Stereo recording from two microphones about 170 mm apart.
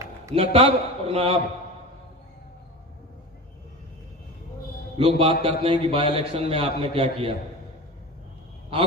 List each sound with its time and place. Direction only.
0.3 s a man's voice: 35° right (ahead or behind)
4.9 s a man's voice: 35° right (ahead or behind)